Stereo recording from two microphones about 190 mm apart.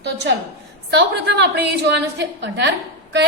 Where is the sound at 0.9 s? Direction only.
60° right (ahead or behind).